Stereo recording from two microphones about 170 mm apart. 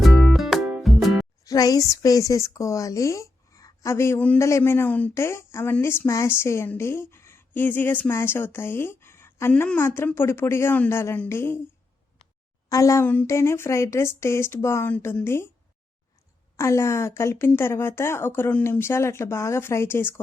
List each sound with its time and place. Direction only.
0.0 s music: centre (ahead or behind)
1.5 s speech: 20° left (ahead or behind)
12.6 s speech: 20° left (ahead or behind)
16.6 s speech: 15° left (ahead or behind)